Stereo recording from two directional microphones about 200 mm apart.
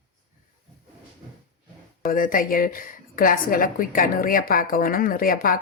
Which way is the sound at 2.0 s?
45° left (ahead or behind).